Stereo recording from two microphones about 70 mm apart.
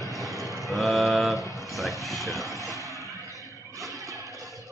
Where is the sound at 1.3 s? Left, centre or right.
Left.